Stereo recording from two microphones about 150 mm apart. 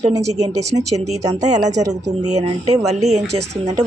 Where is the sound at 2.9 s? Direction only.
50° right (ahead or behind).